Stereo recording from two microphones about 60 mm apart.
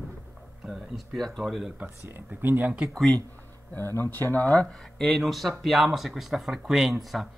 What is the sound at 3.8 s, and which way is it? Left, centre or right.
Speech, left.